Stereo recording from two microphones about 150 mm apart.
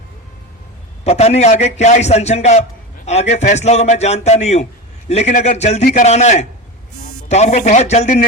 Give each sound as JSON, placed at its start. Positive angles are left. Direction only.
{"t": 1.0, "sound": "a man's voice", "side_deg": 45}